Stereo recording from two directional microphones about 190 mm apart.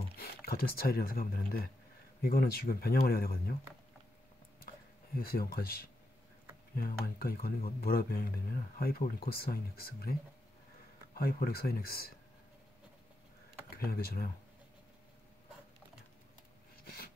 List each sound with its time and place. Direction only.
0.1 s speech: 55° left (ahead or behind)
5.1 s speech: 50° left (ahead or behind)
6.8 s speech: 50° left (ahead or behind)
11.1 s speech: 50° left (ahead or behind)
13.7 s speech: 55° left (ahead or behind)
16.8 s a sound: 50° left (ahead or behind)